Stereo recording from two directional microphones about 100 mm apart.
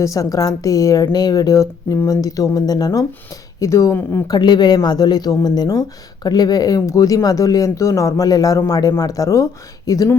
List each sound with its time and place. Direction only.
0.0 s speech: 35° left (ahead or behind)
4.3 s speech: 45° left (ahead or behind)